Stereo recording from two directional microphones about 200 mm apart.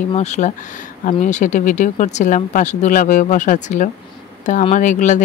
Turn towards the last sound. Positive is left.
turn(degrees=40)  # may be behind; listen again after turning